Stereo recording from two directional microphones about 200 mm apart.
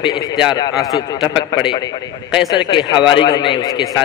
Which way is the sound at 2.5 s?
25° left (ahead or behind).